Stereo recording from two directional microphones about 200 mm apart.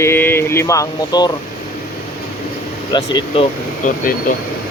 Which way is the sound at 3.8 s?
40° left (ahead or behind).